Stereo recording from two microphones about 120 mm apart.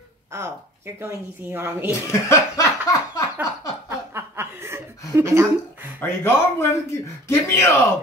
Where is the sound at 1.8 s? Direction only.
25° left (ahead or behind).